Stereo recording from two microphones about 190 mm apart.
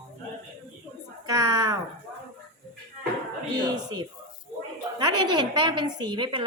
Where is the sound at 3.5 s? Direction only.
20° right (ahead or behind).